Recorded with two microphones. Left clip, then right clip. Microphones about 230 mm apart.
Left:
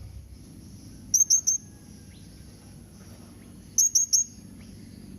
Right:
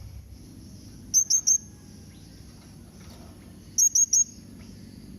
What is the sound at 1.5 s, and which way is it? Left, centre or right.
Bird, centre.